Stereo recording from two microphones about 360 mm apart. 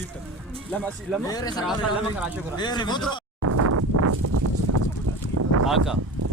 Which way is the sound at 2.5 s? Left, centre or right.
Centre.